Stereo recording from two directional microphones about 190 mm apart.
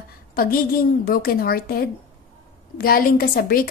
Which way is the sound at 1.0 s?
50° left (ahead or behind).